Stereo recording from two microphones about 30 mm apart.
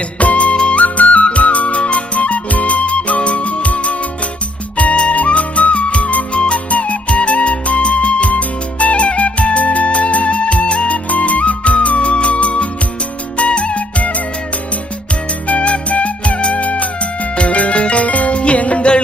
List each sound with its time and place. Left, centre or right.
0.2 s music: left
0.5 s flute: left
0.8 s music: left
6.3 s music: left
6.7 s music: left
13.5 s music: left
15.4 s flute: left
16.4 s music: left